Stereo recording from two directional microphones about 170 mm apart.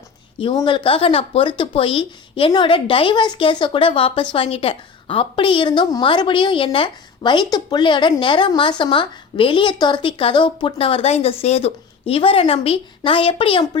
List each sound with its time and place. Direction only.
0.3 s a woman's voice: 30° left (ahead or behind)